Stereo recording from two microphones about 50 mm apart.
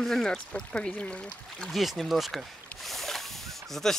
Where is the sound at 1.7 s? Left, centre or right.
Centre.